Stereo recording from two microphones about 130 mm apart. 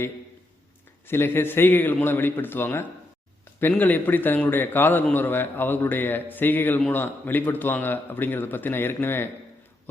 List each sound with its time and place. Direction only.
1.0 s a man's voice: 15° left (ahead or behind)
6.7 s a man's voice: 5° left (ahead or behind)
7.0 s a man's voice: 15° left (ahead or behind)